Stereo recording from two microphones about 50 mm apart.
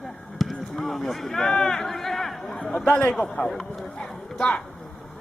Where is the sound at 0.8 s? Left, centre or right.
Centre.